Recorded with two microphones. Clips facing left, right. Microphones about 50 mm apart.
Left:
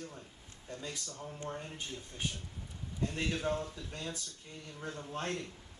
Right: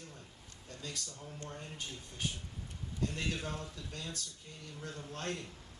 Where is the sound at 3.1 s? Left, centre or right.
Centre.